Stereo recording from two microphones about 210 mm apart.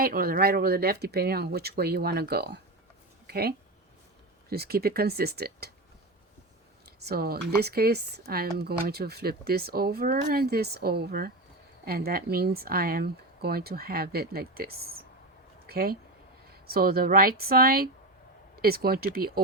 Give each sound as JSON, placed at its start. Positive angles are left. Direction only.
{"t": 0.0, "sound": "speech", "side_deg": -45}
{"t": 7.0, "sound": "speech", "side_deg": -50}